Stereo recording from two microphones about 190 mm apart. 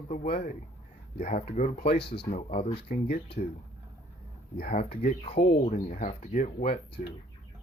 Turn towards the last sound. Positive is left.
turn(degrees=45)  # may be behind; listen again after turning